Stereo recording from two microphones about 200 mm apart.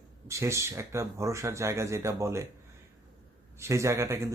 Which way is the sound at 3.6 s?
15° right (ahead or behind).